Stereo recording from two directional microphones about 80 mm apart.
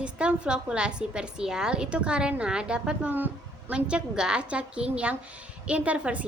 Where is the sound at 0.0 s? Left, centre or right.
Centre.